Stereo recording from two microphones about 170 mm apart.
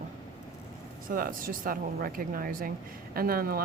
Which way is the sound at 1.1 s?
55° right (ahead or behind).